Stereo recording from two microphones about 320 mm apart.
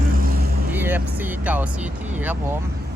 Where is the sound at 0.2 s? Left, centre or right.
Right.